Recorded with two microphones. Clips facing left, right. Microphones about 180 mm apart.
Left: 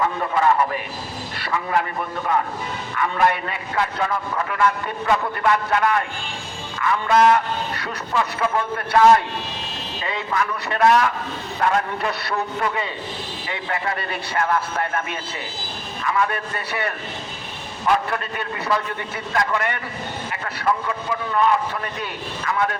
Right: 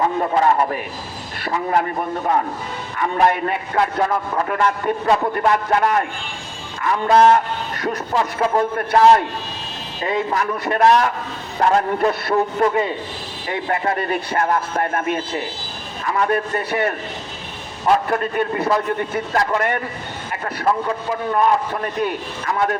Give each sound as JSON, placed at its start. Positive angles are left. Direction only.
{"t": 0.0, "sound": "a man's voice", "side_deg": -35}
{"t": 10.0, "sound": "a man's voice", "side_deg": -45}